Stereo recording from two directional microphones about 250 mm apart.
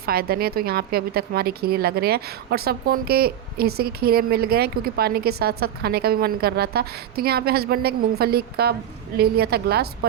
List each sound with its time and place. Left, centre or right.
0.0 s a woman's voice: right